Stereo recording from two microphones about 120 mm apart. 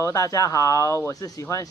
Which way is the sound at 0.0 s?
25° left (ahead or behind).